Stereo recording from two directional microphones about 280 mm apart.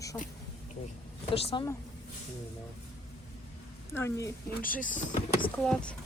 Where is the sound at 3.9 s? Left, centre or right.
Centre.